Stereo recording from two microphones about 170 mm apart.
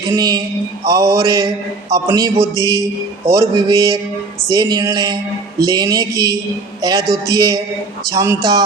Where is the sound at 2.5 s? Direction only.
20° left (ahead or behind).